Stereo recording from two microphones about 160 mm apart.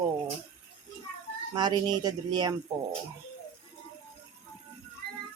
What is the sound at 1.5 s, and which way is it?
Speech, 25° right (ahead or behind).